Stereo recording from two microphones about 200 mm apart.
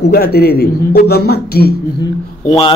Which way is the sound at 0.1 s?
50° left (ahead or behind).